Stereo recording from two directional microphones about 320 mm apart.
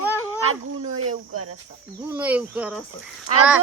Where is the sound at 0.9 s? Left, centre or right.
Right.